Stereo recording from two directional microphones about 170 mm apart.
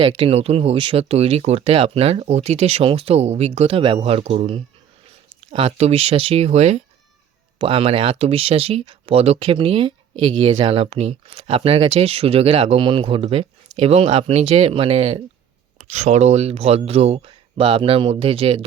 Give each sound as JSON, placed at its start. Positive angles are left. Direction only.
{"t": 0.0, "sound": "speech", "side_deg": -35}